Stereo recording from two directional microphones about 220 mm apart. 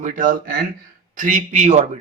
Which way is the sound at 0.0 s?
35° right (ahead or behind).